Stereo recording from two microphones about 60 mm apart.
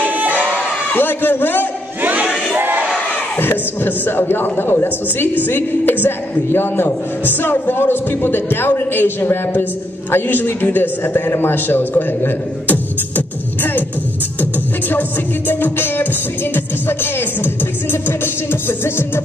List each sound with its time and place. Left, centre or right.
0.0 s crowd: right
0.9 s a sound: left
2.0 s crowd: right
3.3 s a woman's voice: left
14.4 s music: left
16.5 s a man's voice: left
18.0 s music: left